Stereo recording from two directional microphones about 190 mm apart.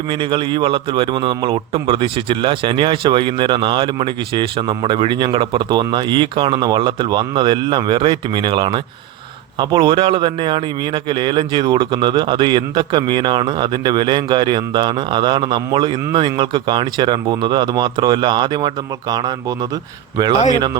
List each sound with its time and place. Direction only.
0.1 s a man's voice: 25° right (ahead or behind)